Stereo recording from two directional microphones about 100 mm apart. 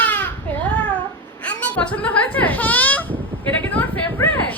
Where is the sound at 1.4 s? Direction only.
15° left (ahead or behind).